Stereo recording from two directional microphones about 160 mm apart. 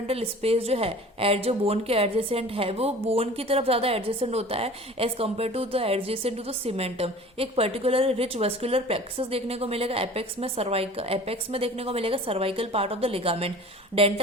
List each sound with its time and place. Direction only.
0.1 s a woman's voice: 40° right (ahead or behind)